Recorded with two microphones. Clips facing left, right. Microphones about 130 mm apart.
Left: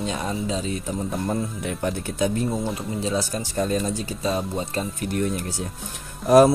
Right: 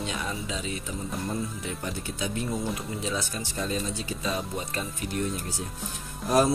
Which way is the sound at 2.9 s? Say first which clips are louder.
Left 6 dB; 35° left (ahead or behind).